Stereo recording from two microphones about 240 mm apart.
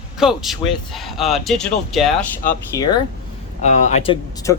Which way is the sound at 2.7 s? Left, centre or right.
Centre.